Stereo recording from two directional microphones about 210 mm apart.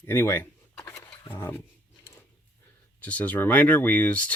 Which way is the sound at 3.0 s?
5° left (ahead or behind).